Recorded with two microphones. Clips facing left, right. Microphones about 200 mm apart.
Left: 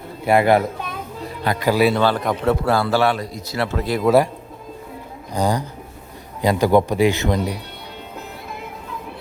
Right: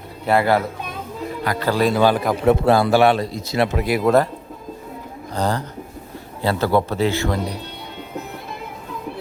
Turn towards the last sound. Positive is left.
turn(degrees=20)  # may be behind; listen again after turning